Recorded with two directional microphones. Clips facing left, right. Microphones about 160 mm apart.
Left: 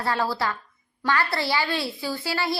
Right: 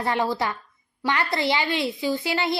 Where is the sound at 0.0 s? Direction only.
20° right (ahead or behind).